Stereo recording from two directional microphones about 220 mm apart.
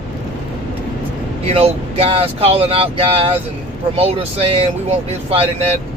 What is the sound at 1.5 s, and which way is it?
Speech, 25° right (ahead or behind).